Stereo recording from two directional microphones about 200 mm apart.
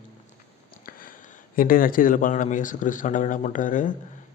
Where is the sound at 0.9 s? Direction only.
45° left (ahead or behind).